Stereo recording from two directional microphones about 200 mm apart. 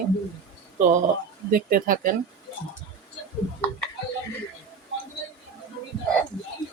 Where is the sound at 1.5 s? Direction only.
45° right (ahead or behind).